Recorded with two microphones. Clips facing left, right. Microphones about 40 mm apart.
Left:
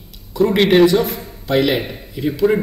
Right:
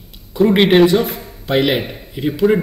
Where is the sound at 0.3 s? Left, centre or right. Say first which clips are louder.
Right 2 dB; centre.